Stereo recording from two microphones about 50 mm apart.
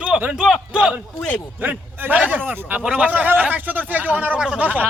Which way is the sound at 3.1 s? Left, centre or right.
Right.